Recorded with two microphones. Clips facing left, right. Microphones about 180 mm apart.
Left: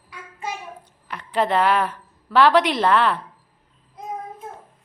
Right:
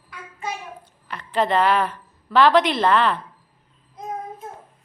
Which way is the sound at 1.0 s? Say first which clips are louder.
Even; 10° left (ahead or behind).